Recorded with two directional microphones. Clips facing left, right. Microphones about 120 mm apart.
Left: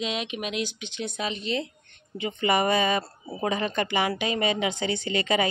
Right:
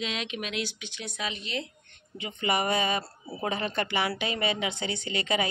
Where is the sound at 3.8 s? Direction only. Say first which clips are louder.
Left 2 dB; 20° left (ahead or behind).